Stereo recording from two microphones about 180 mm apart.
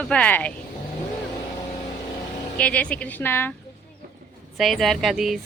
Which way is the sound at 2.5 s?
5° left (ahead or behind).